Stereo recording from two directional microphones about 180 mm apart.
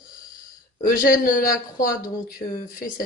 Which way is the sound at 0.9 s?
50° left (ahead or behind).